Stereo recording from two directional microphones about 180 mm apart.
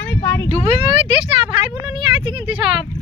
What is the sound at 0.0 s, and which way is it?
Vehicle, 10° left (ahead or behind).